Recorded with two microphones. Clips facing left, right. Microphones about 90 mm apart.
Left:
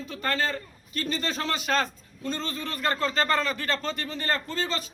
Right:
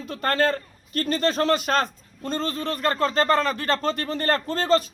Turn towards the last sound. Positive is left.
turn(degrees=-50)  # may be behind; listen again after turning